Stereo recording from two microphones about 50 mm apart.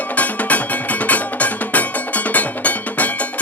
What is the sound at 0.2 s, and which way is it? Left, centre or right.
Music, left.